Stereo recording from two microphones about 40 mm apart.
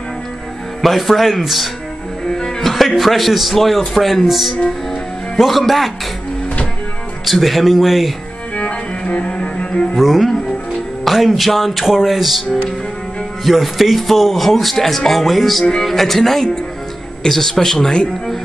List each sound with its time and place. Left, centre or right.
0.8 s speech: centre
2.2 s music: centre
2.6 s music: centre
3.0 s speech: centre
7.2 s speech: centre
8.5 s music: left
9.9 s a man's voice: centre
17.9 s a man's voice: left